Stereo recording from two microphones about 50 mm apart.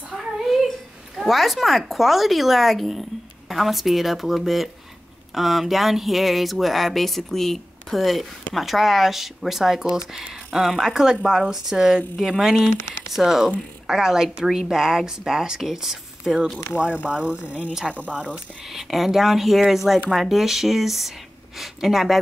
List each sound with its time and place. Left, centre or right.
0.1 s a sound: centre
1.1 s speech: centre
16.7 s speech: right
18.7 s speech: centre